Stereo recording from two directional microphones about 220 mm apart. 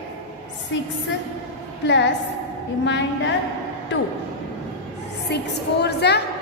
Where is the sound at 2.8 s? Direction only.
55° left (ahead or behind).